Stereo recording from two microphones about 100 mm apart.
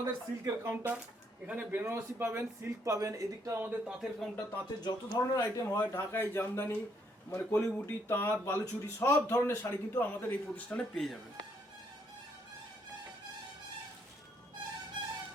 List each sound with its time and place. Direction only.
0.0 s a man's voice: 30° right (ahead or behind)
1.5 s a man's voice: 15° right (ahead or behind)
3.8 s speech: centre (ahead or behind)
4.8 s speech: 40° left (ahead or behind)
5.4 s speech: 25° left (ahead or behind)
10.9 s speech: centre (ahead or behind)